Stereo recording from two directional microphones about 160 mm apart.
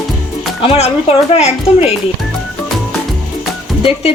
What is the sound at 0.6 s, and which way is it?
A woman's voice, 40° left (ahead or behind).